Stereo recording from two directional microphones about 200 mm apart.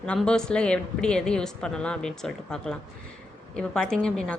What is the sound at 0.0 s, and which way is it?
A woman's voice, 5° left (ahead or behind).